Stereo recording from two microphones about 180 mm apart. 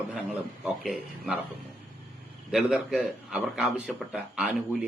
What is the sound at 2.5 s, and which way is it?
A man's voice, 5° right (ahead or behind).